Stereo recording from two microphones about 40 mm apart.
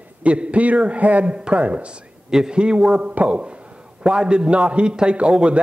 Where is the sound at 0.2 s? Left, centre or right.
Right.